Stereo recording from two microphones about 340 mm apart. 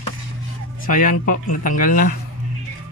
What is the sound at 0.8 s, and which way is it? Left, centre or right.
Speech, left.